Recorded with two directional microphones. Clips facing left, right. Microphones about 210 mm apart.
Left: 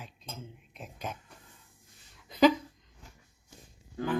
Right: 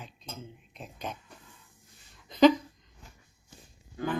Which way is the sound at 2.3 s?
Centre (ahead or behind).